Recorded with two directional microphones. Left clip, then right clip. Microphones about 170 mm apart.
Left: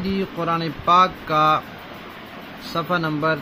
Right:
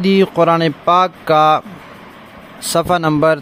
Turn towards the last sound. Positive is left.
turn(degrees=-90)